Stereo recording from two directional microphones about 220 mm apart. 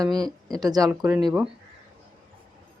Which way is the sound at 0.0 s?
15° right (ahead or behind).